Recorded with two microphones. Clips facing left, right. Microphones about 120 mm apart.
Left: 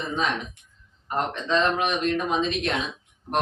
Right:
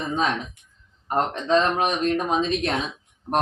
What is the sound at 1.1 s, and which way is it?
A man's voice, 40° right (ahead or behind).